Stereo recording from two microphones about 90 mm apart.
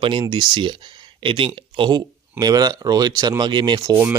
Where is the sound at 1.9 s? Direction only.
45° right (ahead or behind).